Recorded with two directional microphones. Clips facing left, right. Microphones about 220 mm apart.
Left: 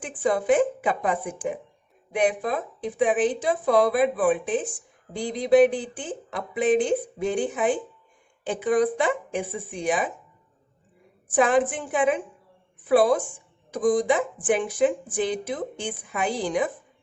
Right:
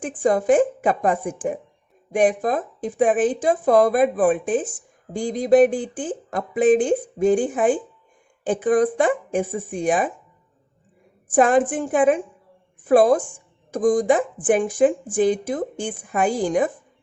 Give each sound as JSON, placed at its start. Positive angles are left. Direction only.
{"t": 0.0, "sound": "speech", "side_deg": -45}
{"t": 11.3, "sound": "speech", "side_deg": -50}